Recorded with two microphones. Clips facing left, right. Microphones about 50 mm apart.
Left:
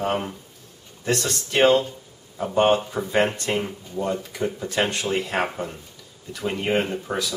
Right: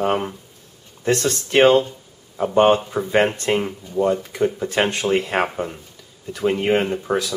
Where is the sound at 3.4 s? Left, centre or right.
Centre.